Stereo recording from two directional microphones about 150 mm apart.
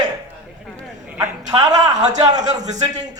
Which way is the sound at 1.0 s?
15° right (ahead or behind).